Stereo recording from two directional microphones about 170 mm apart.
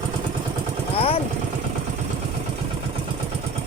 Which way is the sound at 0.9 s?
35° left (ahead or behind).